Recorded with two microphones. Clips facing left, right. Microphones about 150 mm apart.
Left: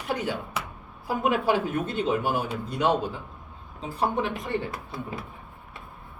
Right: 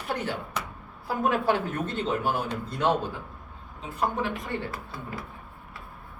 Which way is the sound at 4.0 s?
20° left (ahead or behind).